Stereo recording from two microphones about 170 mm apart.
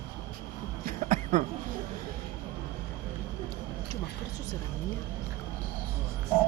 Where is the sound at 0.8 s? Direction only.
50° right (ahead or behind).